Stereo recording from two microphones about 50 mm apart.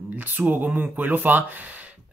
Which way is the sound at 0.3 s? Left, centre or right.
Right.